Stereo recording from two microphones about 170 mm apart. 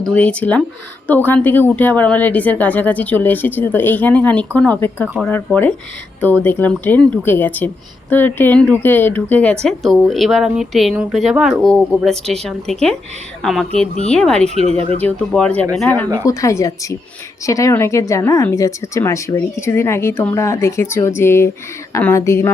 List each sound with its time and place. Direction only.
0.0 s speech: 5° left (ahead or behind)
14.7 s speech: 35° right (ahead or behind)
15.0 s a woman's voice: 5° left (ahead or behind)